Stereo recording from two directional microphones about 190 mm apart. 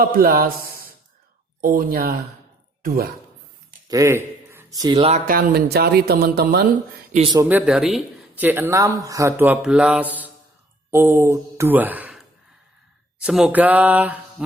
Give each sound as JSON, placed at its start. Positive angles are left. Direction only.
{"t": 0.0, "sound": "a man's voice", "side_deg": -50}
{"t": 3.8, "sound": "speech", "side_deg": -15}
{"t": 5.3, "sound": "speech", "side_deg": -50}
{"t": 7.4, "sound": "speech", "side_deg": -5}